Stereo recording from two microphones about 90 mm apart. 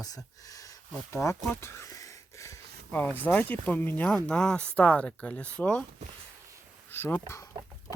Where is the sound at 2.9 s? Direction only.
20° left (ahead or behind).